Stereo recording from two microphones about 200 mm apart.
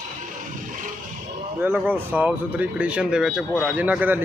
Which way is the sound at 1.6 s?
10° right (ahead or behind).